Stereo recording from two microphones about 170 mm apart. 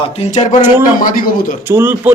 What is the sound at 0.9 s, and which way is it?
Speech, 55° left (ahead or behind).